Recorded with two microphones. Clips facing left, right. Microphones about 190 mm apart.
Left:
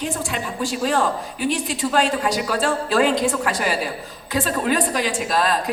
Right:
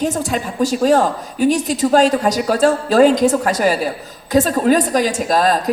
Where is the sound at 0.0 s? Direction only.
40° right (ahead or behind).